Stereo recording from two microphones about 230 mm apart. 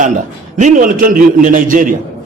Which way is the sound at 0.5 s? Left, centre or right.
Right.